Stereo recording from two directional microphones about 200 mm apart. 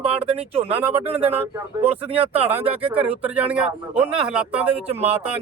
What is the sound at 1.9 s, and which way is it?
Speech, 30° right (ahead or behind).